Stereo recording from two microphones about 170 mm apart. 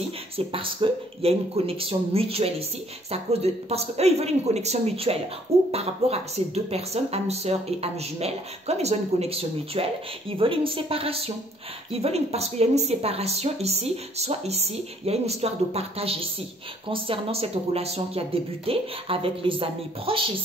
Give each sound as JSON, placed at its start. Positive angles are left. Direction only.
{"t": 0.5, "sound": "a woman's voice", "side_deg": -30}